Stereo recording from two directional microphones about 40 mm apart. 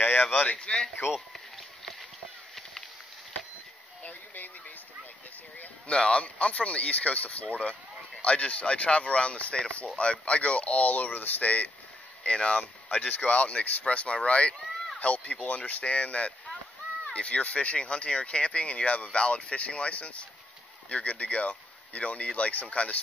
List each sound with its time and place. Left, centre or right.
0.0 s a sound: left
0.6 s speech: left
5.9 s speech: left
12.2 s speech: left